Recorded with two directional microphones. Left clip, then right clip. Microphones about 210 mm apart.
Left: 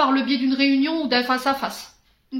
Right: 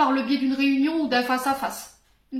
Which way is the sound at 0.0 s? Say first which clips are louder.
Left 2 dB; 45° left (ahead or behind).